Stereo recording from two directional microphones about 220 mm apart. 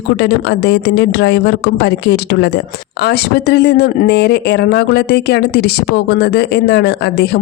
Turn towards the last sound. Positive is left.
turn(degrees=50)  # may be behind; listen again after turning